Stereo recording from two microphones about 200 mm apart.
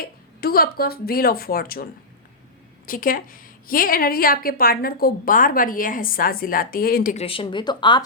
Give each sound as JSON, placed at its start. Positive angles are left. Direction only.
{"t": 0.4, "sound": "a woman's voice", "side_deg": 50}
{"t": 7.2, "sound": "speech", "side_deg": 25}